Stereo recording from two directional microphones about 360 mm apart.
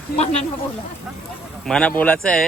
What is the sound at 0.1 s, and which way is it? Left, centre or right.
Speech, left.